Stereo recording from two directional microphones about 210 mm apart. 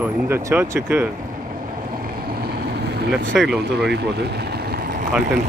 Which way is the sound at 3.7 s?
50° right (ahead or behind).